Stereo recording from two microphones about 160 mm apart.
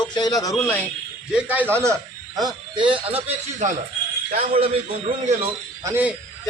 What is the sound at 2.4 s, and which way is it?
Speech, 25° right (ahead or behind).